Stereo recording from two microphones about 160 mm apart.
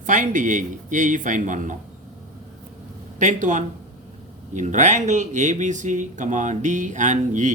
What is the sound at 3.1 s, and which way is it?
Speech, 50° right (ahead or behind).